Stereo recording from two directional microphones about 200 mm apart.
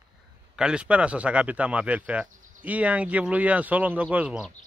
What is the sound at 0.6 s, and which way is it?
Speech, 5° right (ahead or behind).